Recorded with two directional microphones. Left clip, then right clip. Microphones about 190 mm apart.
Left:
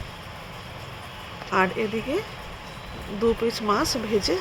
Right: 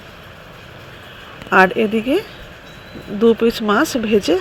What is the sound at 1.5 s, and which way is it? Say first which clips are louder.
Speech: right 10 dB; 30° right (ahead or behind).